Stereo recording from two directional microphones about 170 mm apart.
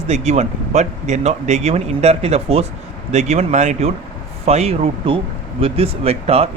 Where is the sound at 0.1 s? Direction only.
40° right (ahead or behind).